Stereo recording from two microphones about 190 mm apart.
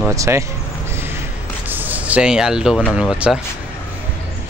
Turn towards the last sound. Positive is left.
turn(degrees=-5)  # may be behind; listen again after turning